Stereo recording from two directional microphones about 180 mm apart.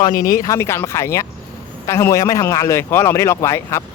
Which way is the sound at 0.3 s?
15° left (ahead or behind).